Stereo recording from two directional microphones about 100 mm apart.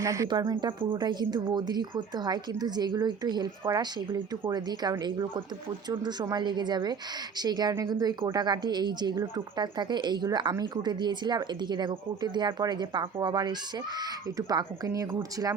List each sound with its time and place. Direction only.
0.0 s speech: 30° right (ahead or behind)
0.9 s speech: 45° right (ahead or behind)